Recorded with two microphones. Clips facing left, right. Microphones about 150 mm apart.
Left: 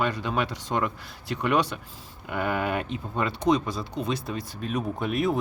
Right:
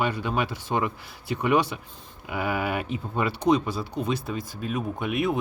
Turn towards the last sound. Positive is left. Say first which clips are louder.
# even
turn(degrees=0)  # may be behind; listen again after turning